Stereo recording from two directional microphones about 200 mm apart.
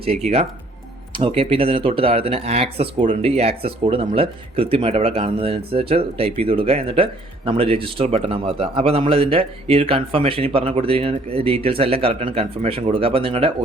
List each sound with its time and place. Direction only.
1.1 s speech: 25° right (ahead or behind)